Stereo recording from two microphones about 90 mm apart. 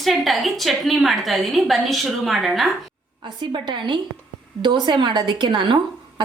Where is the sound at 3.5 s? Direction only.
60° right (ahead or behind).